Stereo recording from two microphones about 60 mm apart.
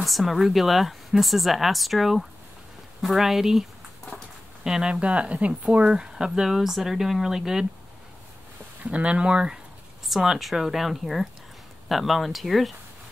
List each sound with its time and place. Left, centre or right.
0.0 s speech: centre
4.6 s speech: centre
8.8 s speech: centre
10.0 s speech: centre